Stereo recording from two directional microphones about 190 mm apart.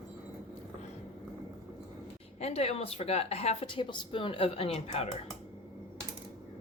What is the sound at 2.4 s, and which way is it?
A woman's voice, 35° left (ahead or behind).